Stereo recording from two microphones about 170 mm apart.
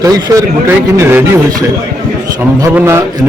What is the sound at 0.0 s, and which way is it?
A man's voice, 20° right (ahead or behind).